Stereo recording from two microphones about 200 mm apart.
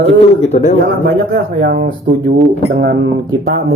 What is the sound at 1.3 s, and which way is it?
Speech, 55° right (ahead or behind).